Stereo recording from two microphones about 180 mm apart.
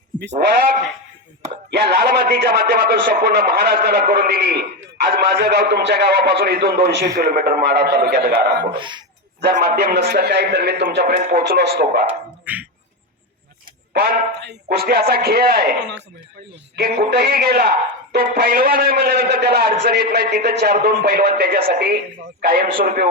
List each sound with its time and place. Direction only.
0.2 s a man's voice: 65° right (ahead or behind)
1.7 s a man's voice: 65° right (ahead or behind)
8.7 s speech: 25° right (ahead or behind)
9.4 s a man's voice: 60° right (ahead or behind)
12.5 s speech: 10° right (ahead or behind)
13.9 s a man's voice: 65° right (ahead or behind)
16.7 s a man's voice: 65° right (ahead or behind)